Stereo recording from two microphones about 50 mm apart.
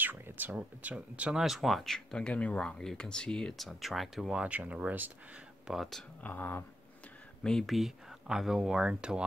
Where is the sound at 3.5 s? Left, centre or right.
Centre.